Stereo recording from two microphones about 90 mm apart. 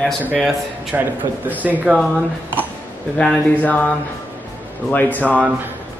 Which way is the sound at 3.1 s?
15° left (ahead or behind).